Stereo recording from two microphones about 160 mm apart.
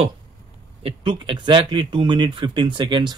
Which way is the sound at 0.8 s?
30° right (ahead or behind).